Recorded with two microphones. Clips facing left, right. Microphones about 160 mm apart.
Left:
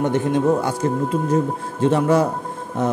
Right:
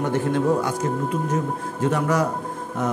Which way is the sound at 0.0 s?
20° left (ahead or behind).